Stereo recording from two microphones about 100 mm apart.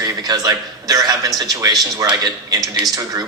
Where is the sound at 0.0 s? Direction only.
40° right (ahead or behind).